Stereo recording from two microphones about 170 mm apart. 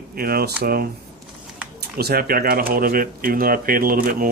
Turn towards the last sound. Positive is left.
turn(degrees=-60)  # may be behind; listen again after turning